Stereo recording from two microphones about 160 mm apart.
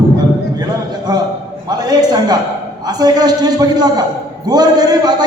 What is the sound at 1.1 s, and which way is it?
A man's voice, 25° right (ahead or behind).